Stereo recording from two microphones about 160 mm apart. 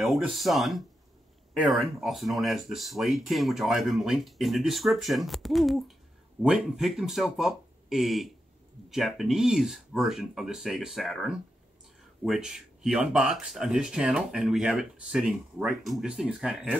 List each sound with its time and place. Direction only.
0.0 s speech: centre (ahead or behind)